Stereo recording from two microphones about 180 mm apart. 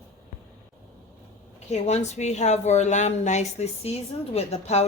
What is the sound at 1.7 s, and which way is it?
A woman's voice, 40° left (ahead or behind).